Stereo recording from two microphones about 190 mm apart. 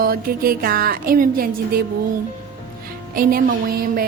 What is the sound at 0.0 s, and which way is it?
Music, 50° right (ahead or behind).